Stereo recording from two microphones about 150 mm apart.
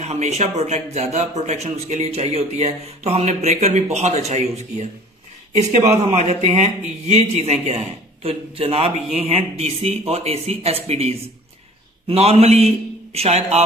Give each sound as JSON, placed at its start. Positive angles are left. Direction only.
{"t": 0.0, "sound": "speech", "side_deg": -45}